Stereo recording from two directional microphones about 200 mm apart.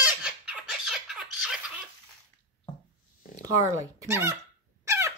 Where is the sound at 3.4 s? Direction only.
15° right (ahead or behind).